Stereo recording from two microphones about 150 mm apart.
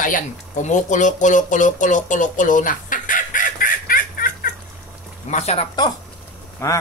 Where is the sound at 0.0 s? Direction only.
60° left (ahead or behind).